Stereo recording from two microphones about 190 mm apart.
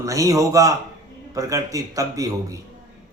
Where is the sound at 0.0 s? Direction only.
15° right (ahead or behind).